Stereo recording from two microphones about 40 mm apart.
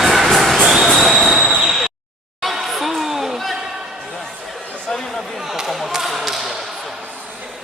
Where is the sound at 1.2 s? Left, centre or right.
Centre.